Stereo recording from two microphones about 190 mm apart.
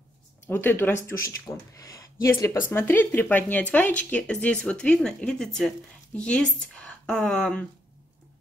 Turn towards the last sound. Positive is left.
turn(degrees=5)  # may be behind; listen again after turning